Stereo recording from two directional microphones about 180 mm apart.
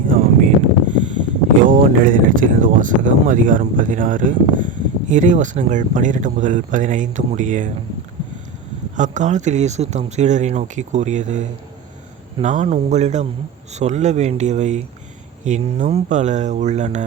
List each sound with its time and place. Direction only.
0.1 s a sound: 50° right (ahead or behind)
1.6 s speech: 50° right (ahead or behind)
9.0 s speech: 40° right (ahead or behind)